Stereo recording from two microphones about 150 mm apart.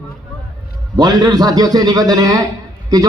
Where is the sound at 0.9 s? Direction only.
25° right (ahead or behind).